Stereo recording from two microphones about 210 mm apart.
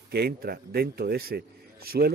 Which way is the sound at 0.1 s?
50° right (ahead or behind).